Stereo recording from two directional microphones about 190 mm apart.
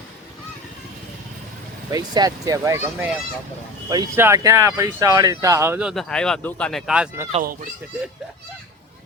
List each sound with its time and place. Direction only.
1.9 s speech: 20° right (ahead or behind)
5.9 s speech: centre (ahead or behind)